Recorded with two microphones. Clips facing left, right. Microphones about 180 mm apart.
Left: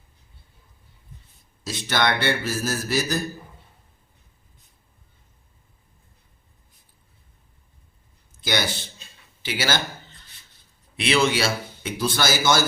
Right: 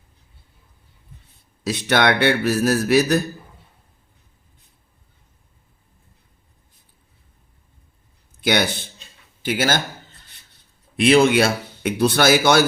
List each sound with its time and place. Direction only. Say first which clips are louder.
1.6 s a man's voice: right 6 dB; 60° right (ahead or behind)
8.4 s speech: right 6 dB; 60° right (ahead or behind)
10.9 s a man's voice: right 7 dB; 45° right (ahead or behind); by 12.6 s 65° right (ahead or behind)